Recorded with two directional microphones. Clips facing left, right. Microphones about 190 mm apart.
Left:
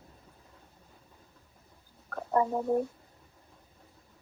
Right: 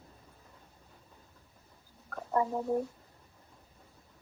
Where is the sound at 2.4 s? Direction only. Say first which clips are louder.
Left 3 dB; 55° left (ahead or behind).